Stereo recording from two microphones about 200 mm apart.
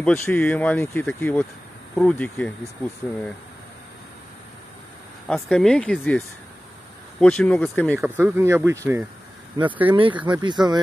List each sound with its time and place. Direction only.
0.0 s speech: 5° left (ahead or behind)
5.3 s speech: centre (ahead or behind)
8.0 s speech: 10° right (ahead or behind)